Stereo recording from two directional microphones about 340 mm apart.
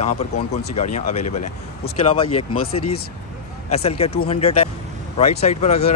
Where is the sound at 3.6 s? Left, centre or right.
Centre.